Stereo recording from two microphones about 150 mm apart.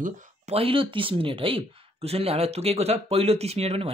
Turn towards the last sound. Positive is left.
turn(degrees=-40)  # may be behind; listen again after turning